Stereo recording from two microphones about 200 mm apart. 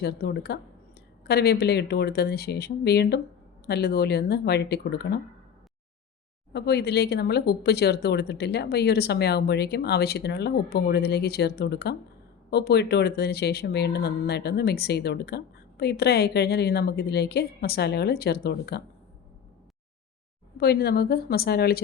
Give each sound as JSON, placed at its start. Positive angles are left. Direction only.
{"t": 0.0, "sound": "a woman's voice", "side_deg": 55}
{"t": 6.5, "sound": "a woman's voice", "side_deg": 55}
{"t": 20.6, "sound": "a woman's voice", "side_deg": 50}